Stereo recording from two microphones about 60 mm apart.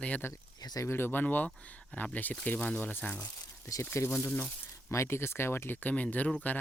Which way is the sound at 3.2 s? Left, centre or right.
Left.